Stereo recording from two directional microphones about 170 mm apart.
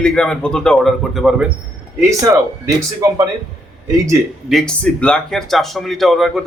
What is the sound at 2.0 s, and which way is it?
Speech, 20° right (ahead or behind).